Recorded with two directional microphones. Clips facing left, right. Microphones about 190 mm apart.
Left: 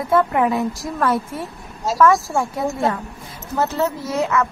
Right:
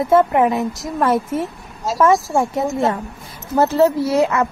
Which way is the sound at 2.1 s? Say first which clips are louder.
Right 3 dB; centre (ahead or behind).